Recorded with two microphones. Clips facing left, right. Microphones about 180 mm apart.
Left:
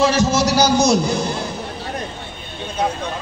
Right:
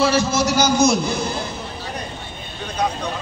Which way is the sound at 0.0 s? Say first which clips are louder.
Left 2 dB; 40° left (ahead or behind).